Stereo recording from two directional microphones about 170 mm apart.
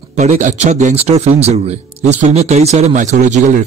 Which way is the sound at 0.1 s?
45° right (ahead or behind).